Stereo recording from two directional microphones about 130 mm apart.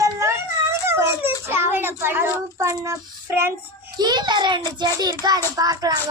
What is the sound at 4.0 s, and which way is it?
Child singing, 35° right (ahead or behind).